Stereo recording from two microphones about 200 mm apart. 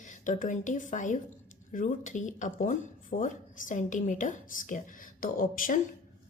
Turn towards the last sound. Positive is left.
turn(degrees=45)  # may be behind; listen again after turning